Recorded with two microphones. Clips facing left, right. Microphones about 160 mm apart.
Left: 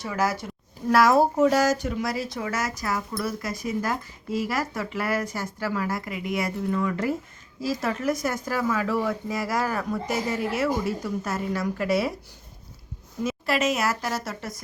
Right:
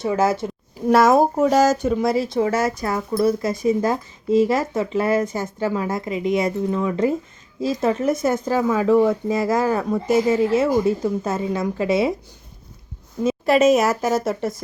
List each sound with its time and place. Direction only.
0.0 s speech: 25° right (ahead or behind)
13.2 s speech: 25° right (ahead or behind)